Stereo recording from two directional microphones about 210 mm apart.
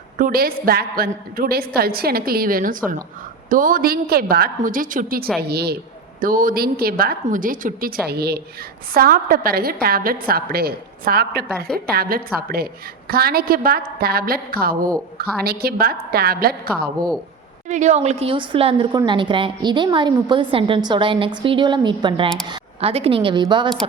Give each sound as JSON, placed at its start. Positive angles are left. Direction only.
{"t": 0.2, "sound": "a woman's voice", "side_deg": -45}
{"t": 17.7, "sound": "a woman's voice", "side_deg": -35}